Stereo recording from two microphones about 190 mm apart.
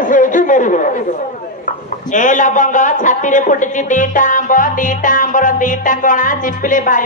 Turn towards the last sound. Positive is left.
turn(degrees=45)  # may be behind; listen again after turning